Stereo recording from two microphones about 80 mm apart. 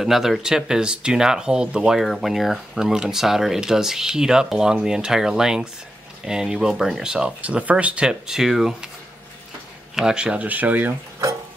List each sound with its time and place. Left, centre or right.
0.0 s speech: centre
2.0 s speech: centre
9.9 s speech: centre